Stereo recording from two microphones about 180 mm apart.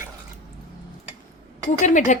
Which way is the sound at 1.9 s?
40° left (ahead or behind).